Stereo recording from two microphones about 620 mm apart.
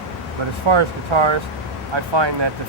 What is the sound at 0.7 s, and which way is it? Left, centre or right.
Speech, right.